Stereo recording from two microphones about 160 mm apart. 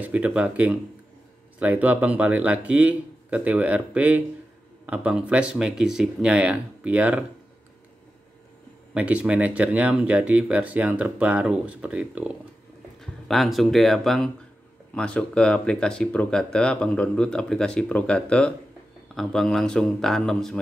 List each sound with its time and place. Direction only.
0.0 s speech: 10° right (ahead or behind)
8.9 s speech: 10° right (ahead or behind)